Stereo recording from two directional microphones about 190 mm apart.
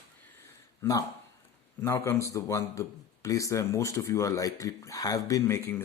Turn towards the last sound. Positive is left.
turn(degrees=10)  # may be behind; listen again after turning